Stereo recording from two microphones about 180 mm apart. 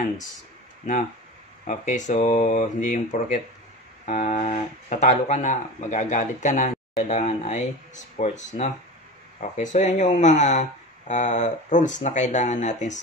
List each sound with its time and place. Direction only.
1.7 s speech: 45° left (ahead or behind)